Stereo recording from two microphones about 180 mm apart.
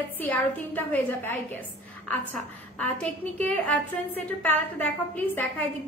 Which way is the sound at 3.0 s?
5° left (ahead or behind).